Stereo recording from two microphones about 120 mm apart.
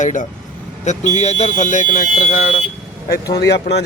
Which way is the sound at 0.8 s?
75° left (ahead or behind).